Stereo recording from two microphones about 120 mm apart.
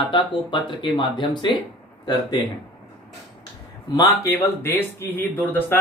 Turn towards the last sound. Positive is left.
turn(degrees=15)  # may be behind; listen again after turning